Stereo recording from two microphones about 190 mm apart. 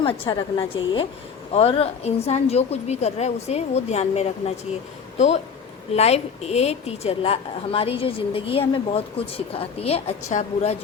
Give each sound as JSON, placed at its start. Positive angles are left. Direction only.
{"t": 0.0, "sound": "a woman's voice", "side_deg": 25}